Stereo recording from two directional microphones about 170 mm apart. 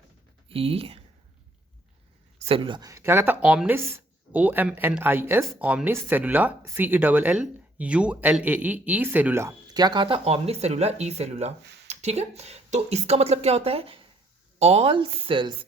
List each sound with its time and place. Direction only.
0.4 s speech: 35° right (ahead or behind)
2.4 s speech: 30° right (ahead or behind)